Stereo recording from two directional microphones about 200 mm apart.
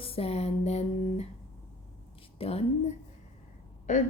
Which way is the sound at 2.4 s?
30° left (ahead or behind).